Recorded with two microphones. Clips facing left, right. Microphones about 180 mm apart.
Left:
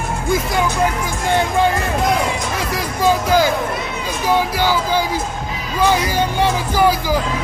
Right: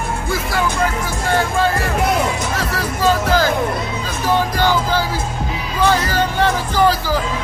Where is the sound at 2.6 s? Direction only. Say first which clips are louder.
Even; 15° left (ahead or behind).